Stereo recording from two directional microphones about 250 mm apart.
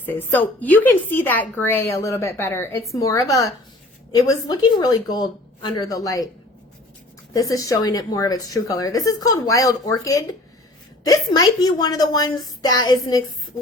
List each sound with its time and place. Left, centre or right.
0.0 s speech: centre
7.3 s speech: centre